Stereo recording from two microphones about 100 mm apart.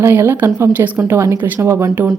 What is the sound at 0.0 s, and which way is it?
A woman's voice, 20° right (ahead or behind).